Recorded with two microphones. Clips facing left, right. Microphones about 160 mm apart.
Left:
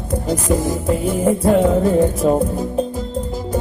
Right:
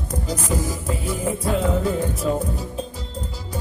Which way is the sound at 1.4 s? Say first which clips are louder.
Left 7 dB; 45° left (ahead or behind).